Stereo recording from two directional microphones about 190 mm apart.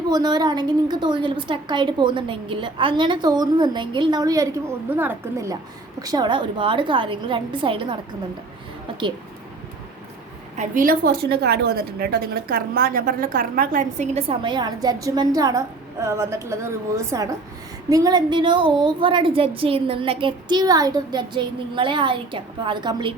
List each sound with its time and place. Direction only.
0.1 s a woman's voice: 20° right (ahead or behind)
10.6 s a woman's voice: 45° right (ahead or behind); by 23.1 s 25° right (ahead or behind)